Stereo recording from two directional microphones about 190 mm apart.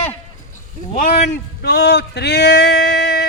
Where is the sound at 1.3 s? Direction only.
60° left (ahead or behind).